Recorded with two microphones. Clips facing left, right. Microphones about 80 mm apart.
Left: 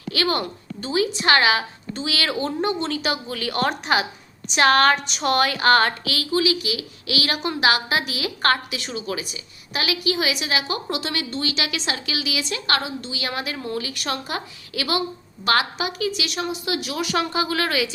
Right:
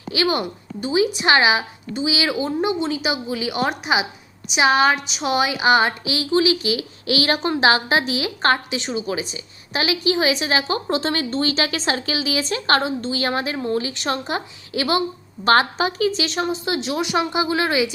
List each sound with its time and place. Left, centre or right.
0.1 s a woman's voice: centre